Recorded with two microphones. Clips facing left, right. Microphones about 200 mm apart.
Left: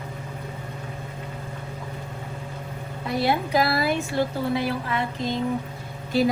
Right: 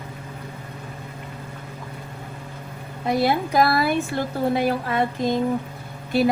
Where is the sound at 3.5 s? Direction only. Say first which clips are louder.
Right 3 dB; 50° right (ahead or behind).